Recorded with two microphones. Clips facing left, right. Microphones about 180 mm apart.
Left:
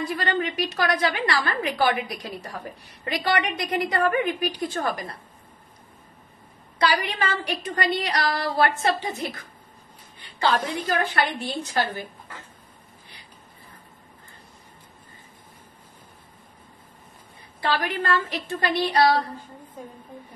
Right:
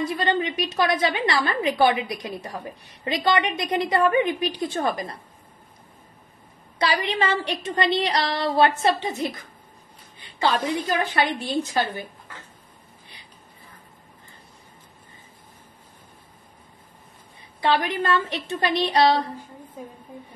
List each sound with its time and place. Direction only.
0.2 s a woman's voice: 20° right (ahead or behind)
6.8 s a woman's voice: 25° right (ahead or behind)
17.6 s a woman's voice: 20° right (ahead or behind)